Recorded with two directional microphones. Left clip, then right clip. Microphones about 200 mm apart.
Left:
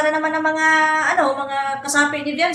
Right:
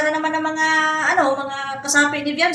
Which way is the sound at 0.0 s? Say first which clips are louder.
Left 2 dB; centre (ahead or behind).